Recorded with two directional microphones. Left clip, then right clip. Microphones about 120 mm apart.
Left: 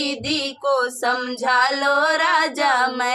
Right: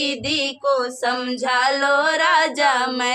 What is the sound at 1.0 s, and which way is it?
Female singing, 15° right (ahead or behind).